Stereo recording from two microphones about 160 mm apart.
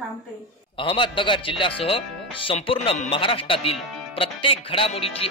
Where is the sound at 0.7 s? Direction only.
30° left (ahead or behind).